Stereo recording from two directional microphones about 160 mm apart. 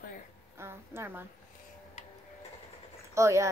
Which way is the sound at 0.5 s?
15° right (ahead or behind).